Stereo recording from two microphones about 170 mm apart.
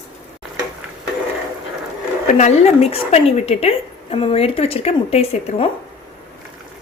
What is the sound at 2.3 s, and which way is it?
Speech, 40° left (ahead or behind).